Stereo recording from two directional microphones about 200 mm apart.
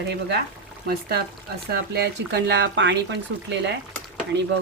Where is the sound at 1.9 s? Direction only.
55° right (ahead or behind).